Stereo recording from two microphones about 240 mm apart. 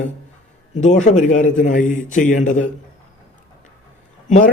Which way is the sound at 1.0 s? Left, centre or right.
Left.